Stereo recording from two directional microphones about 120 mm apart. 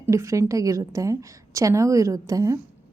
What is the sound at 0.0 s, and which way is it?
A woman's voice, 25° right (ahead or behind).